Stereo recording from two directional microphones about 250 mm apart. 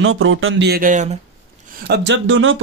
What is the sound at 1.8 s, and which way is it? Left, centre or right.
Speech, right.